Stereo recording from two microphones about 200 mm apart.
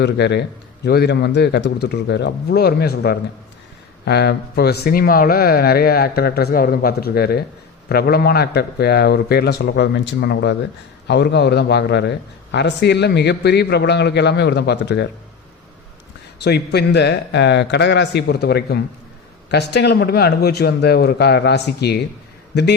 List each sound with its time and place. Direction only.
0.0 s a man's voice: 55° left (ahead or behind)
16.4 s a man's voice: 55° left (ahead or behind)